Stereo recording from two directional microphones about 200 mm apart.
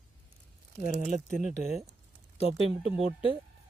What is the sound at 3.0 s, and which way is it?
Speech, 25° left (ahead or behind).